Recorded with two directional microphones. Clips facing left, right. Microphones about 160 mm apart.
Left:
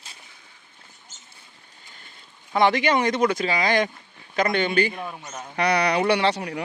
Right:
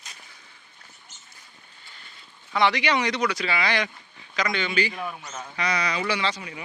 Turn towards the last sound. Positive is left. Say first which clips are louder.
# left 6 dB
turn(degrees=70)  # may be behind; listen again after turning